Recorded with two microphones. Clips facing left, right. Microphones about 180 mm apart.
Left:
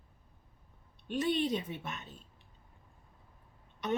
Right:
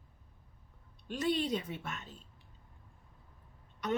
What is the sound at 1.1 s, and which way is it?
Speech, 20° left (ahead or behind).